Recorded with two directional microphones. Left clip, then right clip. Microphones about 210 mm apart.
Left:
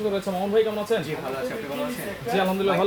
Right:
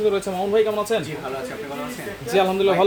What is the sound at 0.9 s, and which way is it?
Speech, 60° right (ahead or behind).